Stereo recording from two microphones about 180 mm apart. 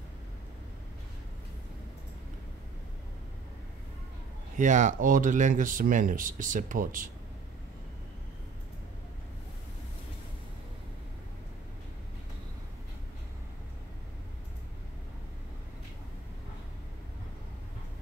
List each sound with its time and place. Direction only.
4.6 s speech: 45° right (ahead or behind)